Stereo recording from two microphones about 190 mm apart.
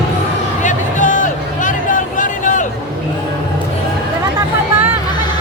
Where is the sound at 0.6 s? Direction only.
40° left (ahead or behind).